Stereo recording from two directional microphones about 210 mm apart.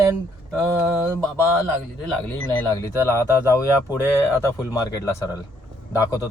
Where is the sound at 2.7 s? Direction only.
15° left (ahead or behind).